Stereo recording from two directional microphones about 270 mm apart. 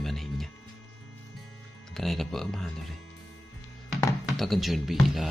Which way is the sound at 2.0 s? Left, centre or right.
Centre.